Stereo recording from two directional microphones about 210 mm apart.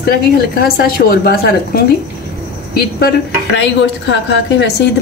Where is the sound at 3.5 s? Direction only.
60° left (ahead or behind).